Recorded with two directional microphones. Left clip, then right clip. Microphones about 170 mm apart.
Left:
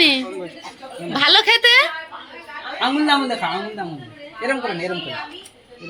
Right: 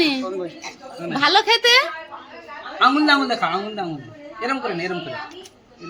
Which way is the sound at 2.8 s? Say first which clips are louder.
Right 2 dB; 25° left (ahead or behind).